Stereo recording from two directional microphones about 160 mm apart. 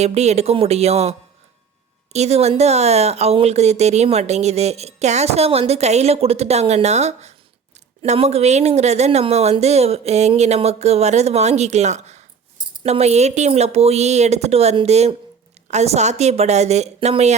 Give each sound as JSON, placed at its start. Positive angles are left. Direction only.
{"t": 0.0, "sound": "speech", "side_deg": -45}
{"t": 2.1, "sound": "speech", "side_deg": -40}